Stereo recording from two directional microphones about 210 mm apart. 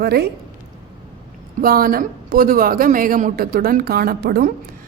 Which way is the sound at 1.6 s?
45° right (ahead or behind).